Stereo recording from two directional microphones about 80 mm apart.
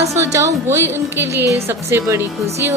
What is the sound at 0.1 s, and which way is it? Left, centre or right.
A woman's voice, right.